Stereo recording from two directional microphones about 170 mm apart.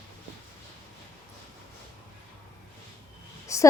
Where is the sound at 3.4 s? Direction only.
20° left (ahead or behind).